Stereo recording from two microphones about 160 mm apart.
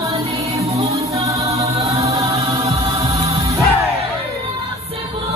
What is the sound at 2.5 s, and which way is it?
Music, 20° right (ahead or behind).